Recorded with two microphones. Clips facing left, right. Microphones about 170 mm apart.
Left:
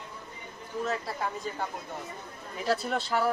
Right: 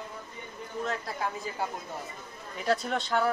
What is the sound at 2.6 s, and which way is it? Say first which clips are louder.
Speech: even; 5° left (ahead or behind).